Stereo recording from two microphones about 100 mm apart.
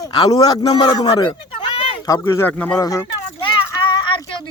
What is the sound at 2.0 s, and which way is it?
Speech, 35° left (ahead or behind).